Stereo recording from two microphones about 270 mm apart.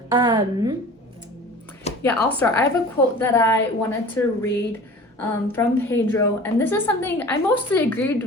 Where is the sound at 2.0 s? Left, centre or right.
Centre.